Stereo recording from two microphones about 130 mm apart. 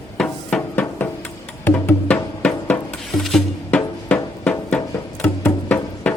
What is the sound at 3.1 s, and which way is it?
Music, centre (ahead or behind).